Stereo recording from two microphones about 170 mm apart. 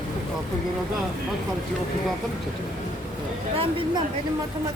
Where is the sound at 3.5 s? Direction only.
35° right (ahead or behind).